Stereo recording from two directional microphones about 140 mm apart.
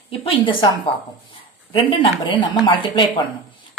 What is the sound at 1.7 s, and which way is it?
A woman's voice, 35° left (ahead or behind).